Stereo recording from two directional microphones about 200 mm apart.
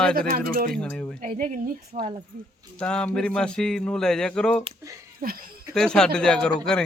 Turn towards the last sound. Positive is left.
turn(degrees=5)  # may be behind; listen again after turning